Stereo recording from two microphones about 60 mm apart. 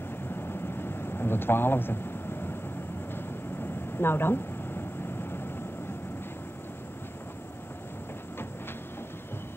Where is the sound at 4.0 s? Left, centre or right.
Left.